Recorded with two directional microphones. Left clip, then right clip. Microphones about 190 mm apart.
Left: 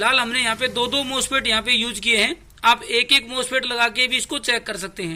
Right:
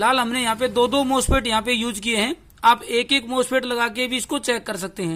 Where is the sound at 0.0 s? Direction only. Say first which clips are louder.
Left 1 dB; 40° right (ahead or behind).